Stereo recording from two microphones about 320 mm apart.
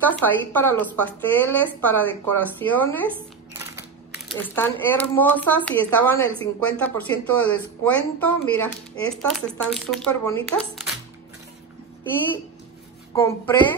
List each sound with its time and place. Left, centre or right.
0.0 s speech: centre
4.3 s speech: centre
13.1 s a woman's voice: centre